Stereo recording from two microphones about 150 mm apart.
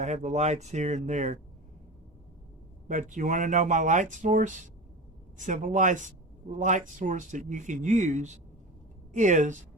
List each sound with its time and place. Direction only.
0.0 s speech: 50° right (ahead or behind)
2.8 s speech: 55° right (ahead or behind)